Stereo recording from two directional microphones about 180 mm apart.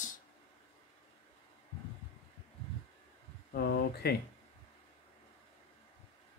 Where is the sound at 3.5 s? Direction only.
60° left (ahead or behind).